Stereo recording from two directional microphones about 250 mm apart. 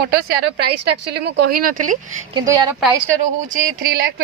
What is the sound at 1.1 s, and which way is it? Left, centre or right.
Speech, right.